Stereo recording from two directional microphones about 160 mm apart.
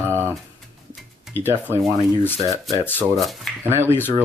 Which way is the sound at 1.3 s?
15° left (ahead or behind).